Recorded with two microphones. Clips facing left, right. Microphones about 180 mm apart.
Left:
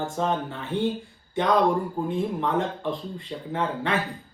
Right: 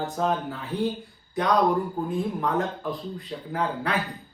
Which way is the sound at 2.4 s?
Centre (ahead or behind).